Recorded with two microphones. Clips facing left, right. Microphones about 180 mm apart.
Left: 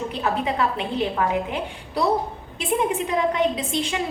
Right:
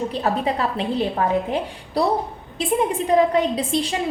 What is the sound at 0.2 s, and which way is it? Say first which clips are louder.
A woman's voice: even; 35° right (ahead or behind).